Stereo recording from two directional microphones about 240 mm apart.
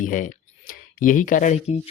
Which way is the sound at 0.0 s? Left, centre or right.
Left.